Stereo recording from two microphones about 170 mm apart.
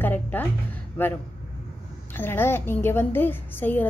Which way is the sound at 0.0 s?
10° left (ahead or behind).